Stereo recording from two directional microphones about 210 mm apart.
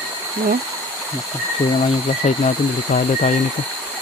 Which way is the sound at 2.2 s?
35° left (ahead or behind).